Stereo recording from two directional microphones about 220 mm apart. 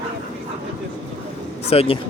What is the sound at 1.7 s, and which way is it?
Speech, 25° left (ahead or behind).